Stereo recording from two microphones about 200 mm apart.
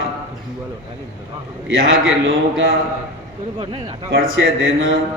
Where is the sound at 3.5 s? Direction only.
25° right (ahead or behind).